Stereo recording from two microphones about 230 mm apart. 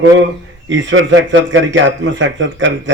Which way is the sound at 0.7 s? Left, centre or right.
Right.